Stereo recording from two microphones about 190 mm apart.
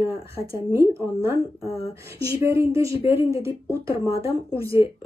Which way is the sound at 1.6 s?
30° left (ahead or behind).